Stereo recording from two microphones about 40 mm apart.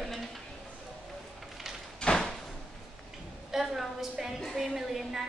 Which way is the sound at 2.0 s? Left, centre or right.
Left.